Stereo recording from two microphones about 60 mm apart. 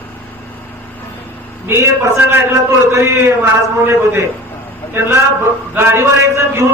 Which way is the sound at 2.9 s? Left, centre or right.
Right.